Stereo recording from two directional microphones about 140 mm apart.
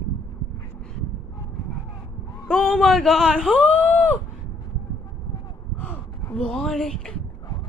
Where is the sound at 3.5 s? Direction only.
10° left (ahead or behind).